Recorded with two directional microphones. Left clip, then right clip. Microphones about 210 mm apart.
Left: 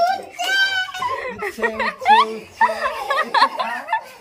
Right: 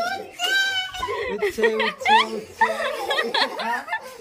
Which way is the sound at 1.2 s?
10° right (ahead or behind).